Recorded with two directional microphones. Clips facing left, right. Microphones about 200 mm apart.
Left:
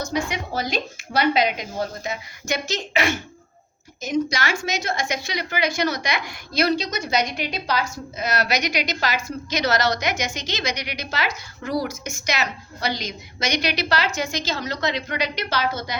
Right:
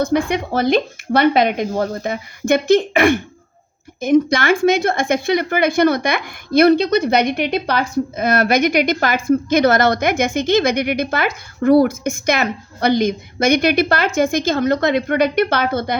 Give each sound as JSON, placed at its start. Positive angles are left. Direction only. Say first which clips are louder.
{"t": 0.0, "sound": "a woman's voice", "louder": "right 9 dB", "side_deg": -55}